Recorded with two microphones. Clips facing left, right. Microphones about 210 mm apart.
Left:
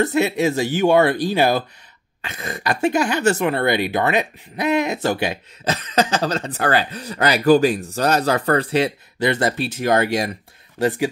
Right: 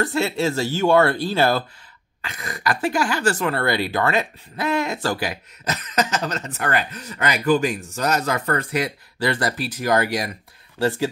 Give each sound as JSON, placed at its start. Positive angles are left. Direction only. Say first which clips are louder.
{"t": 0.0, "sound": "speech", "louder": "left 3 dB", "side_deg": 20}